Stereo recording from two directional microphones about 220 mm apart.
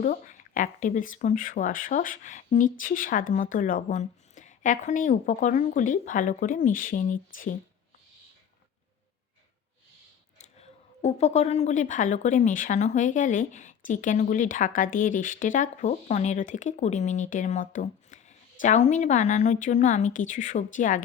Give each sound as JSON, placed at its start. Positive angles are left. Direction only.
{"t": 0.0, "sound": "speech", "side_deg": 40}
{"t": 10.3, "sound": "speech", "side_deg": 30}